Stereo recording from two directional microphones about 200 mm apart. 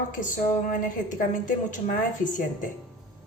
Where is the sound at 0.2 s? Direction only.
40° left (ahead or behind).